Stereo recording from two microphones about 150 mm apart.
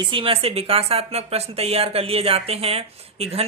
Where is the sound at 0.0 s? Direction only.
35° right (ahead or behind).